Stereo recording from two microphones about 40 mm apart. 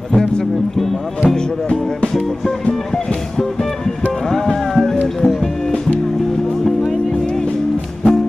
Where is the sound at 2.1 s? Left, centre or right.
Centre.